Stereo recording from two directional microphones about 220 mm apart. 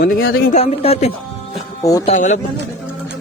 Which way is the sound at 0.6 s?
30° left (ahead or behind).